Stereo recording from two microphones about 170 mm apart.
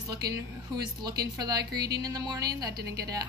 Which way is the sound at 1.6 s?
70° right (ahead or behind).